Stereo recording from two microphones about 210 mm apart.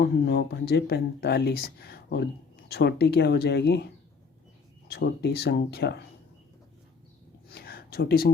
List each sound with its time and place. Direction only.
0.0 s speech: 50° left (ahead or behind)
4.9 s speech: 50° left (ahead or behind)
7.5 s a sound: 50° left (ahead or behind)